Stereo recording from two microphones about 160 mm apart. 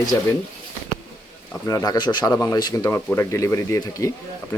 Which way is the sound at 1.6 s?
20° left (ahead or behind).